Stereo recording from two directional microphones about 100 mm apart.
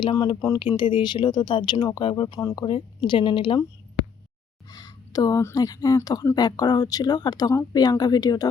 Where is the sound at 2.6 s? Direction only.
70° left (ahead or behind).